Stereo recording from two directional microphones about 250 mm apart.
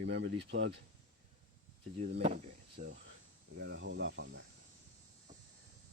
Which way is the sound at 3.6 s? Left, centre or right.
Right.